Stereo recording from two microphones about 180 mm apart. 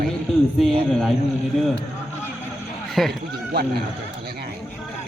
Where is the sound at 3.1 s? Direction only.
60° right (ahead or behind).